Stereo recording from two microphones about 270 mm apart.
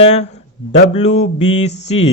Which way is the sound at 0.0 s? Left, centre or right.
Left.